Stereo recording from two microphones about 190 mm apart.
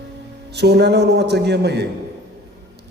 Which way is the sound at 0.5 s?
60° right (ahead or behind).